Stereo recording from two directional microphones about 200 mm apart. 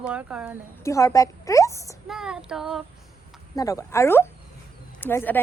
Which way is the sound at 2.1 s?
5° right (ahead or behind).